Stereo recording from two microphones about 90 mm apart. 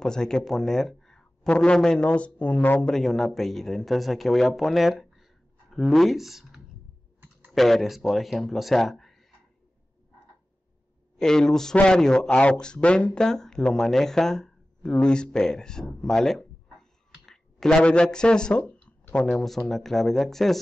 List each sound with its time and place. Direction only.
0.0 s speech: 5° left (ahead or behind)
2.9 s speech: 5° left (ahead or behind)
11.1 s speech: 5° left (ahead or behind)